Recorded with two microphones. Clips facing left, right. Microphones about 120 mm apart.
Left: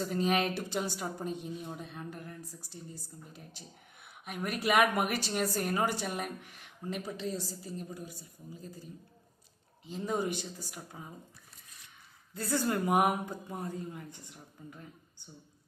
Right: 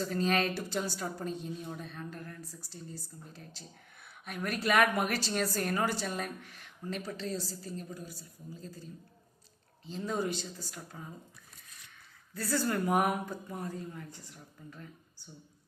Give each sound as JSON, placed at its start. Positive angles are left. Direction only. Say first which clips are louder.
{"t": 0.0, "sound": "a woman's voice", "louder": "even", "side_deg": 15}
{"t": 9.8, "sound": "a woman's voice", "louder": "left 1 dB", "side_deg": 15}
{"t": 12.3, "sound": "a woman's voice", "louder": "even", "side_deg": 20}